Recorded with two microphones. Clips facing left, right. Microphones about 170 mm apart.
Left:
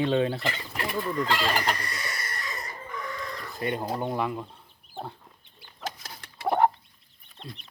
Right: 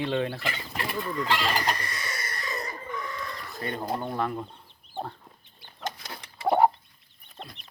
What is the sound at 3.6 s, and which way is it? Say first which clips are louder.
Speech: left 2 dB; 15° left (ahead or behind).